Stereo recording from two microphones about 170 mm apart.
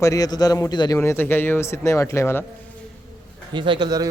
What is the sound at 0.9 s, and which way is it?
Speech, 15° left (ahead or behind).